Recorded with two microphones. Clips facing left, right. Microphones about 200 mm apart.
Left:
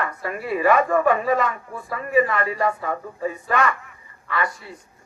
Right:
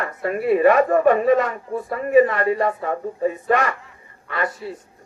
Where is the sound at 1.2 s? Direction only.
65° right (ahead or behind).